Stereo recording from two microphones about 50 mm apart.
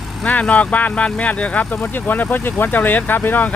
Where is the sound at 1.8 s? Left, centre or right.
Left.